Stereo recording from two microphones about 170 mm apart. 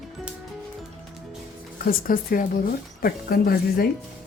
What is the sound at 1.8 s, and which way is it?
A woman's voice, 55° left (ahead or behind).